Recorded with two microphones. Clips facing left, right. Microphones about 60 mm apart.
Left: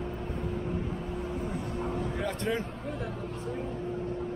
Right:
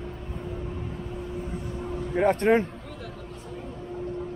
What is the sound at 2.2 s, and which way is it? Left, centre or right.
Speech, right.